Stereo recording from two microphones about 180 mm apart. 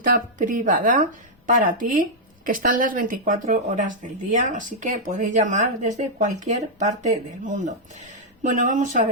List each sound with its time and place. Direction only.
0.0 s speech: 50° right (ahead or behind)